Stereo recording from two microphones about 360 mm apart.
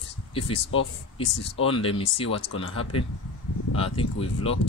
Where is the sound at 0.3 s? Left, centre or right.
Centre.